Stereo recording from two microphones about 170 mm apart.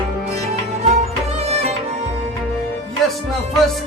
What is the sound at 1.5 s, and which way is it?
Music, 40° right (ahead or behind).